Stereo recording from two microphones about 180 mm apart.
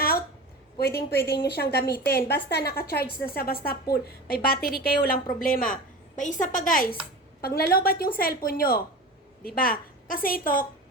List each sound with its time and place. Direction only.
0.8 s a woman's voice: 60° left (ahead or behind)
1.1 s a woman's voice: 15° left (ahead or behind)
1.5 s a woman's voice: 60° left (ahead or behind)
1.9 s a woman's voice: 15° left (ahead or behind)
2.2 s a woman's voice: 65° left (ahead or behind)